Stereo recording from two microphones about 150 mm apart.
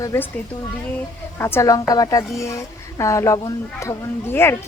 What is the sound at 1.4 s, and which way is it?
A woman's voice, 15° left (ahead or behind).